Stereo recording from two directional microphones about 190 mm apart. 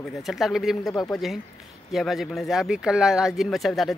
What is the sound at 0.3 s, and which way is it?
Speech, centre (ahead or behind).